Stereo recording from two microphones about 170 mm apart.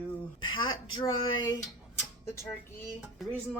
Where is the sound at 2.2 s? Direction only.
15° left (ahead or behind).